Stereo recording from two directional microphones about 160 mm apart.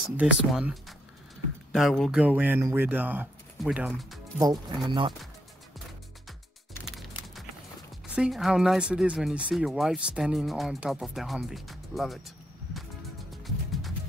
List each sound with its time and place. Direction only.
0.2 s speech: 5° right (ahead or behind)
4.4 s speech: 25° right (ahead or behind)
6.9 s typing: centre (ahead or behind)
8.1 s speech: 5° right (ahead or behind)
13.4 s music: centre (ahead or behind)